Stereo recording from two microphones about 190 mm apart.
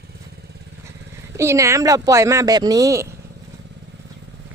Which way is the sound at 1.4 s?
15° right (ahead or behind).